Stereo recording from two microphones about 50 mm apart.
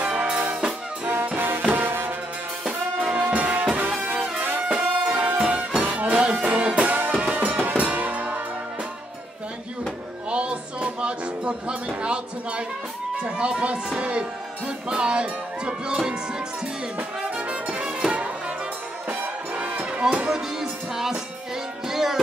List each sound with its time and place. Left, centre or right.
0.0 s brass instrument: right
1.0 s music: right
2.6 s brass instrument: centre
3.2 s music: right
4.6 s music: right
10.3 s a sound: right
13.2 s speech: right
17.2 s music: right
20.2 s music: centre